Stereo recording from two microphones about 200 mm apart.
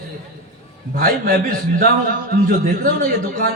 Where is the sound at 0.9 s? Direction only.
45° right (ahead or behind).